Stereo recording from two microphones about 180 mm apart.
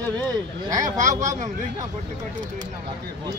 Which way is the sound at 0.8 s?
45° right (ahead or behind).